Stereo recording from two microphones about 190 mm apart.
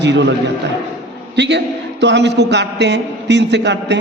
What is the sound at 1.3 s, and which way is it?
A man's voice, 65° right (ahead or behind).